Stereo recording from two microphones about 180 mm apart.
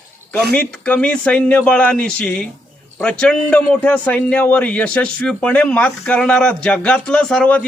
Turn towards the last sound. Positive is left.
turn(degrees=5)  # may be behind; listen again after turning